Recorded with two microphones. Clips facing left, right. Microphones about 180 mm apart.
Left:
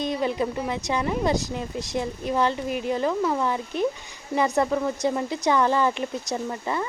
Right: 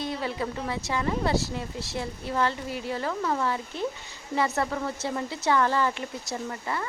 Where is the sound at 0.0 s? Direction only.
20° left (ahead or behind).